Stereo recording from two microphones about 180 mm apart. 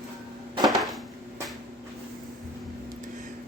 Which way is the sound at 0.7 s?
Centre (ahead or behind).